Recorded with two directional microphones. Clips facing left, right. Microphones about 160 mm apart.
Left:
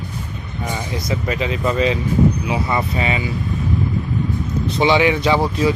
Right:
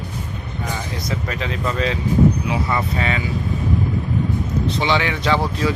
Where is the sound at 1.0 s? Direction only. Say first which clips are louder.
Left 5 dB; 10° left (ahead or behind).